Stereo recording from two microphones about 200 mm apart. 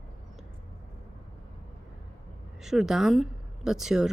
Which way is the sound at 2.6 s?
Centre (ahead or behind).